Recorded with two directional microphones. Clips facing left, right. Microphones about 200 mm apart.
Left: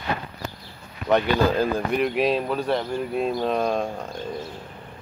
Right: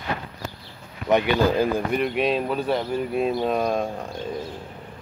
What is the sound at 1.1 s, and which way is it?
Speech, 10° right (ahead or behind).